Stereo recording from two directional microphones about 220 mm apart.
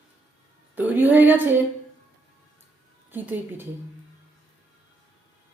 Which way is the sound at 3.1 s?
10° right (ahead or behind).